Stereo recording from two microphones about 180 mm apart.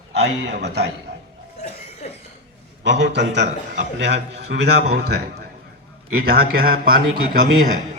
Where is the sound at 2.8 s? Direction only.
75° right (ahead or behind); by 6.9 s 55° right (ahead or behind).